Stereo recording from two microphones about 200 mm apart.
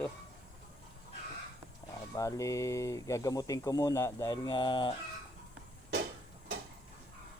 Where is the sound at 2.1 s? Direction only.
15° left (ahead or behind).